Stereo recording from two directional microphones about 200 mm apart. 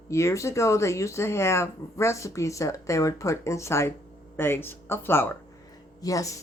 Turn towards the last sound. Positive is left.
turn(degrees=15)  # may be behind; listen again after turning